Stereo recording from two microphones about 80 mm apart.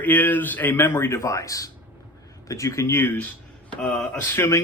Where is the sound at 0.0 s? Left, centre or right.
Left.